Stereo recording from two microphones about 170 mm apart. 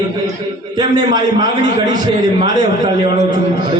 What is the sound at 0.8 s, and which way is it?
A man's voice, 25° right (ahead or behind).